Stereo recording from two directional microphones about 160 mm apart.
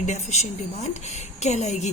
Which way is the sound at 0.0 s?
45° left (ahead or behind).